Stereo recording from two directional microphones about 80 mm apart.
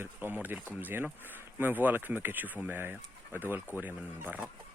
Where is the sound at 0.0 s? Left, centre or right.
Right.